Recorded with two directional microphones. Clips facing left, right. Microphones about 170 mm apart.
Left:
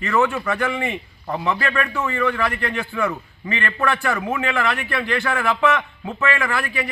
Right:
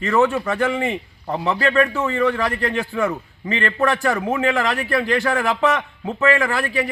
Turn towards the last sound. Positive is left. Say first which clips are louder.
# right 3 dB
turn(degrees=-35)  # may be behind; listen again after turning